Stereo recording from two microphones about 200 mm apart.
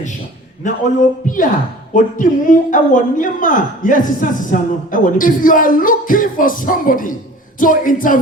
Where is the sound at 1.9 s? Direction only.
40° left (ahead or behind).